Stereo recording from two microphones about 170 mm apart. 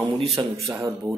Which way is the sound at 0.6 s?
20° right (ahead or behind).